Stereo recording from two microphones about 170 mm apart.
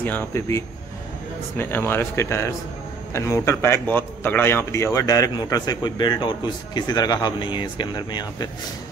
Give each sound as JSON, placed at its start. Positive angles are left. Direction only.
{"t": 0.0, "sound": "a man's voice", "side_deg": 15}